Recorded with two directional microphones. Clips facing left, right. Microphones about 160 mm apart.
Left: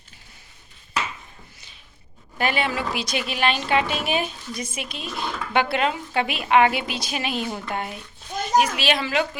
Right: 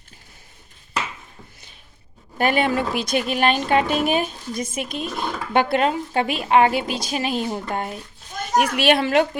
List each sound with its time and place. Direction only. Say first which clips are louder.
2.4 s a woman's voice: right 4 dB; 50° right (ahead or behind)
8.5 s speech: right 3 dB; 60° right (ahead or behind)